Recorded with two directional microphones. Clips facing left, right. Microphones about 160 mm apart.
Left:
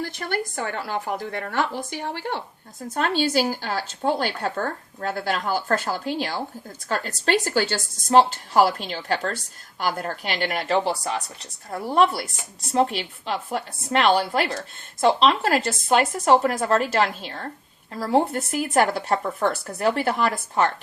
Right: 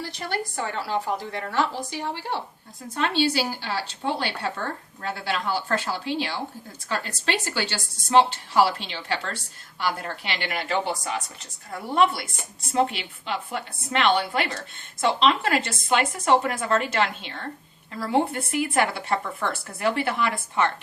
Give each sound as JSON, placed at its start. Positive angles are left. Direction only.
{"t": 0.0, "sound": "a woman's voice", "side_deg": 50}